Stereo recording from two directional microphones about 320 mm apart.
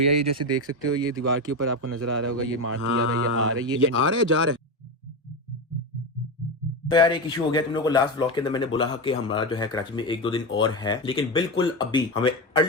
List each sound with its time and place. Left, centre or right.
0.0 s speech: right
6.9 s speech: centre